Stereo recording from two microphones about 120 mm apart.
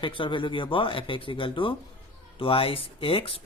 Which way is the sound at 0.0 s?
45° left (ahead or behind).